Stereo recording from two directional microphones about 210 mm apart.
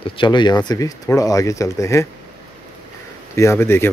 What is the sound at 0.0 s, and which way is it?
Speech, 20° left (ahead or behind).